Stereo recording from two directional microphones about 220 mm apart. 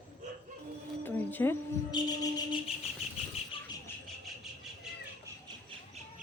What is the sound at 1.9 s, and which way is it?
Music, 20° left (ahead or behind).